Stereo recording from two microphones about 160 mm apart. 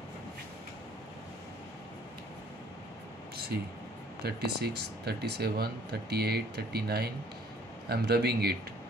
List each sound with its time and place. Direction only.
4.2 s speech: 90° right